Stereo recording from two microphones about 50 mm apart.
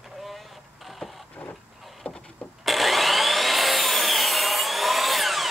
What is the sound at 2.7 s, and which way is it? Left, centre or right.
Sawing, centre.